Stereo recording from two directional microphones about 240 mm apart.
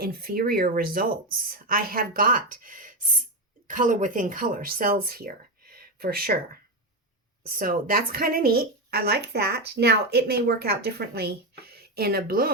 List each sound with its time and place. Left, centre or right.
0.0 s speech: right
5.7 s a sound: right
7.4 s speech: right